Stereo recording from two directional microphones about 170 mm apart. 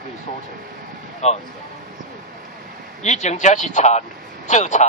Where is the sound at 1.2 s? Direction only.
40° left (ahead or behind).